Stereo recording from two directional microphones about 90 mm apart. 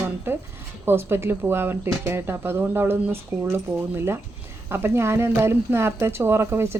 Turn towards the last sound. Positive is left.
turn(degrees=-30)  # may be behind; listen again after turning